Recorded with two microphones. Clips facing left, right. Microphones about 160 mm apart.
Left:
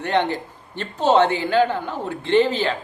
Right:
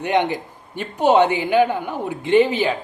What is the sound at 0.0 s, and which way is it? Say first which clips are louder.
A man's voice: right 1 dB; 15° right (ahead or behind).